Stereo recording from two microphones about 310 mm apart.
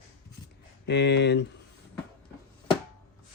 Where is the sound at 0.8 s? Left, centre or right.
Left.